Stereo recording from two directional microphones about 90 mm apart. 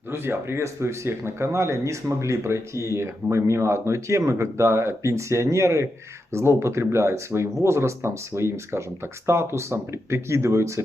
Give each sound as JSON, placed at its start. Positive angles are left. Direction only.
{"t": 0.1, "sound": "speech", "side_deg": -25}